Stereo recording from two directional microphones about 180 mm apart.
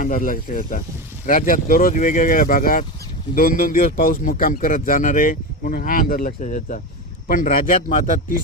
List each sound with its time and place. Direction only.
0.0 s a man's voice: 50° left (ahead or behind)